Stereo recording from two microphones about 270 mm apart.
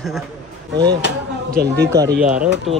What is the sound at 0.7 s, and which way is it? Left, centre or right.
Speech, right.